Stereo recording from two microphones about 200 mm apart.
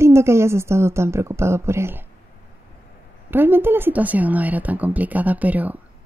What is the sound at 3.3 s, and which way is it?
Speech, 10° right (ahead or behind).